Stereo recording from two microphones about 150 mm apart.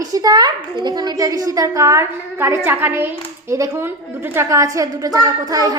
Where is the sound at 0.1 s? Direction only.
25° right (ahead or behind).